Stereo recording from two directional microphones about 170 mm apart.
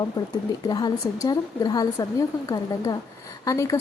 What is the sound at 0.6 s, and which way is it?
A woman's voice, 25° left (ahead or behind).